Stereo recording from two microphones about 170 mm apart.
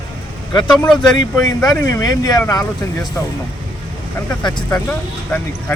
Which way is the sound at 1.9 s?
20° left (ahead or behind).